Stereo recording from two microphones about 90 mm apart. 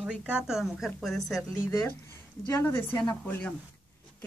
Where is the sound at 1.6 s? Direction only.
20° left (ahead or behind).